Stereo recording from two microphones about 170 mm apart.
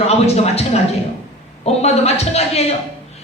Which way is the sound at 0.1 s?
40° left (ahead or behind).